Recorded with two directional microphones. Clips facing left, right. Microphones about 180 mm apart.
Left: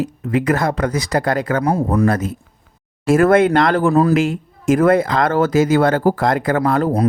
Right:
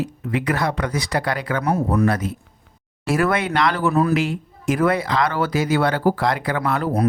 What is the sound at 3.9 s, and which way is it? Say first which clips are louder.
Speech: left 3 dB; 35° left (ahead or behind).